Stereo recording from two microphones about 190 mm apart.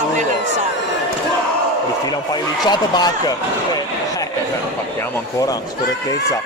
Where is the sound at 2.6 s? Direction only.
20° left (ahead or behind).